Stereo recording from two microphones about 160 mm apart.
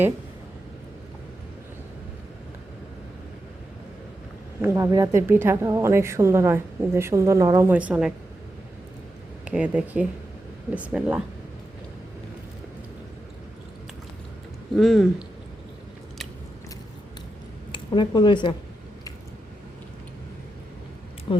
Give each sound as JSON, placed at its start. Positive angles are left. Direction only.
{"t": 4.6, "sound": "a woman's voice", "side_deg": -15}
{"t": 9.4, "sound": "a woman's voice", "side_deg": -5}
{"t": 14.8, "sound": "speech", "side_deg": 0}
{"t": 17.7, "sound": "speech", "side_deg": 30}